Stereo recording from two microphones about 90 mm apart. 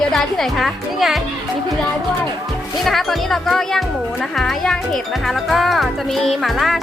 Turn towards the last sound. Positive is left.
turn(degrees=0)  # may be behind; listen again after turning